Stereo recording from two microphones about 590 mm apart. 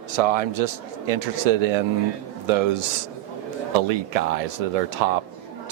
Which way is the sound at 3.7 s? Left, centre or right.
Right.